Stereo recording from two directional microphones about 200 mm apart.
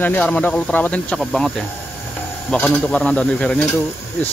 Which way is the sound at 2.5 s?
5° left (ahead or behind).